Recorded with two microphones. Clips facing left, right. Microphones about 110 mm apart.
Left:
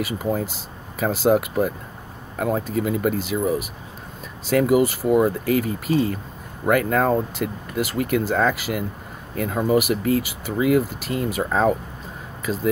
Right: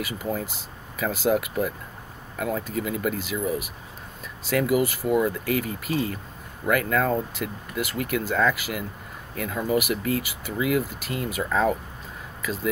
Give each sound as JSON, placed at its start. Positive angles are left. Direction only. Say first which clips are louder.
{"t": 0.0, "sound": "speech", "louder": "left 5 dB", "side_deg": 30}